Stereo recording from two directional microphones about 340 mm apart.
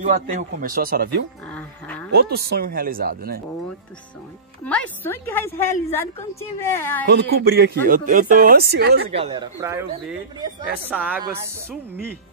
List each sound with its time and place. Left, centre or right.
0.0 s a woman's voice: right
1.5 s livestock: centre
2.0 s a woman's voice: right
4.6 s a woman's voice: centre
7.1 s a woman's voice: right
9.1 s a woman's voice: centre